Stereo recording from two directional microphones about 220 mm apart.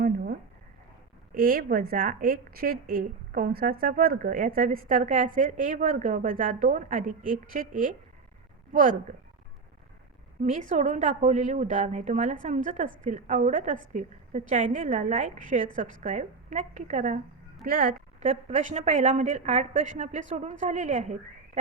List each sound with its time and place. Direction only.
1.3 s a woman's voice: 40° right (ahead or behind)
10.4 s a woman's voice: 35° right (ahead or behind)